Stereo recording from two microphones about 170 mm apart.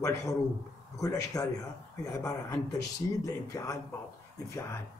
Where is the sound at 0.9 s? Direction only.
20° left (ahead or behind).